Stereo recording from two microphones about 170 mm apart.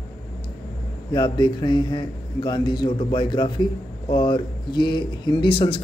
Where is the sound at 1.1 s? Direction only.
30° left (ahead or behind).